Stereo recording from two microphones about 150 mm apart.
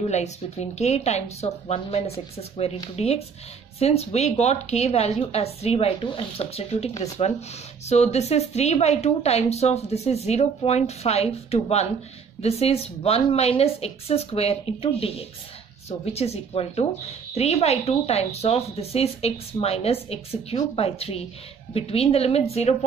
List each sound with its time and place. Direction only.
0.0 s a woman's voice: 50° left (ahead or behind)